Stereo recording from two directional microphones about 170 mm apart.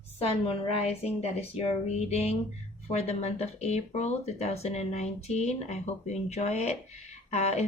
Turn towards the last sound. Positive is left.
turn(degrees=40)  # may be behind; listen again after turning